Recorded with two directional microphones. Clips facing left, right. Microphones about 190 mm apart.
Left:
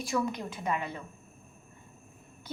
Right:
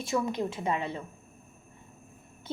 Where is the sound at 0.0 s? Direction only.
25° right (ahead or behind).